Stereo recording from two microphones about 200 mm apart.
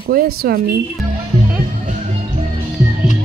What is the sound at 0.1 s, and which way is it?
Speech, 50° right (ahead or behind).